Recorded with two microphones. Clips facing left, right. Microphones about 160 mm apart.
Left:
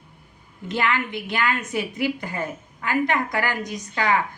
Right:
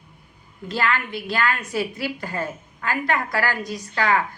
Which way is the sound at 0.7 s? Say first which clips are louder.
Even; 20° left (ahead or behind).